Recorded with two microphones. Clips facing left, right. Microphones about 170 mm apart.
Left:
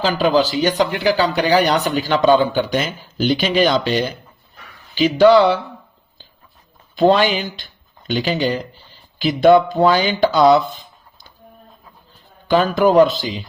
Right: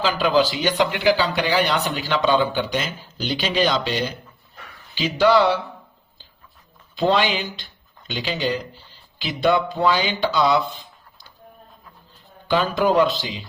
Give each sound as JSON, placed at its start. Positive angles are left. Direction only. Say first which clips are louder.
{"t": 0.0, "sound": "speech", "louder": "left 3 dB", "side_deg": 45}
{"t": 6.9, "sound": "speech", "louder": "left 6 dB", "side_deg": 50}
{"t": 12.5, "sound": "speech", "louder": "left 5 dB", "side_deg": 45}